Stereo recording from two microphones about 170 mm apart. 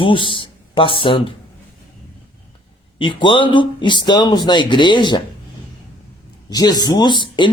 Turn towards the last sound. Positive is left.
turn(degrees=25)  # may be behind; listen again after turning